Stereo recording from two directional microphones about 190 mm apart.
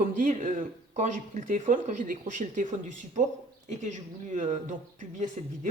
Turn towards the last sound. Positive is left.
turn(degrees=-40)  # may be behind; listen again after turning